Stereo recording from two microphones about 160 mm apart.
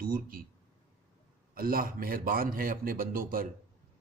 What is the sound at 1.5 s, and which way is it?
A man's voice, 65° right (ahead or behind).